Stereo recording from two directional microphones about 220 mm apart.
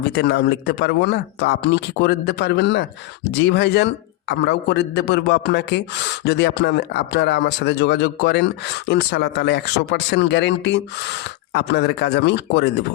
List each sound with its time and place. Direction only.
0.1 s speech: 50° left (ahead or behind)